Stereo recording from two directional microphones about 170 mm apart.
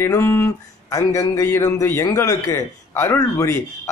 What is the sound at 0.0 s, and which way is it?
A man's voice, 15° left (ahead or behind).